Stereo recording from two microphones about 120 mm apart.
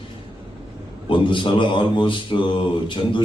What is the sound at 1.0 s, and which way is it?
Speech, 45° left (ahead or behind).